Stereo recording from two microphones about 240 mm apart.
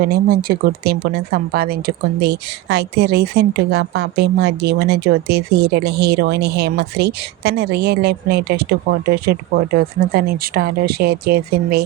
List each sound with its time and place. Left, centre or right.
0.0 s a woman's voice: right